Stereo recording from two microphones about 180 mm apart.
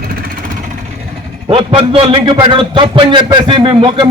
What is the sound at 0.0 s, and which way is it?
Vehicle, 55° right (ahead or behind).